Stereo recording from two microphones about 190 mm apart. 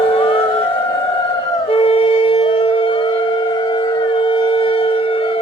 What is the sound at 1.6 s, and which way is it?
Wind instrument, 30° left (ahead or behind).